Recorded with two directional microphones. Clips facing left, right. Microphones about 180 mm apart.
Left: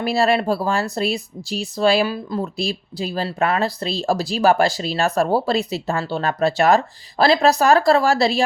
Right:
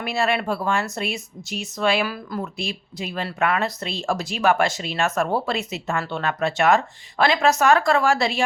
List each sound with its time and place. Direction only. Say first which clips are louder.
0.0 s speech: left 5 dB; 35° left (ahead or behind)